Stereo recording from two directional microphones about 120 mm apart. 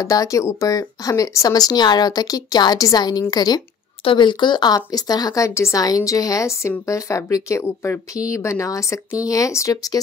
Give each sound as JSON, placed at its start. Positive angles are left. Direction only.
{"t": 0.0, "sound": "speech", "side_deg": 30}